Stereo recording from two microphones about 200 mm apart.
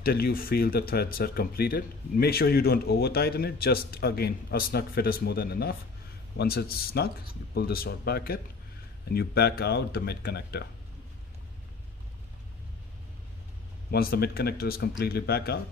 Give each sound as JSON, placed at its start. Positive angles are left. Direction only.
{"t": 0.0, "sound": "speech", "side_deg": 50}
{"t": 13.8, "sound": "speech", "side_deg": 50}